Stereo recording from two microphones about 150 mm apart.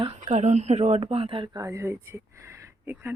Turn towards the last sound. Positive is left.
turn(degrees=-15)  # may be behind; listen again after turning